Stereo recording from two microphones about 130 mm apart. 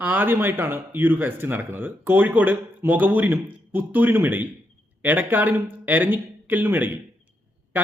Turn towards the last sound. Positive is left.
turn(degrees=-15)  # may be behind; listen again after turning